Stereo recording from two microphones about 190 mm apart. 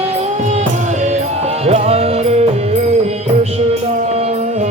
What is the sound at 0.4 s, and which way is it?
Music, 40° right (ahead or behind).